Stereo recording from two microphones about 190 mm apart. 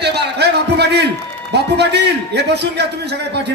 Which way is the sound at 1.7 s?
60° right (ahead or behind).